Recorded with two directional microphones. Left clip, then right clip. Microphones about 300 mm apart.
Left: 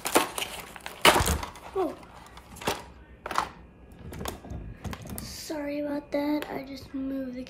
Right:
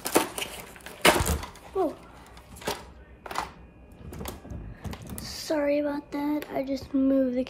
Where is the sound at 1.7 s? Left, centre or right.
Centre.